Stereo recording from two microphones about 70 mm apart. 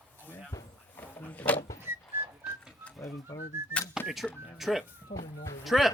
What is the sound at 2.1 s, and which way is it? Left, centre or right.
Whistling, right.